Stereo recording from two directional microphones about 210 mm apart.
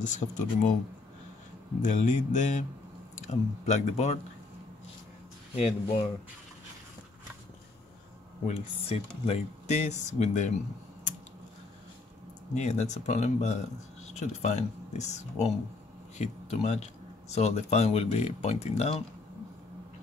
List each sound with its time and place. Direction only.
0.1 s speech: 35° left (ahead or behind)
1.8 s speech: 35° left (ahead or behind)
5.6 s speech: 30° left (ahead or behind)
8.5 s speech: 30° left (ahead or behind)
12.5 s speech: 35° left (ahead or behind)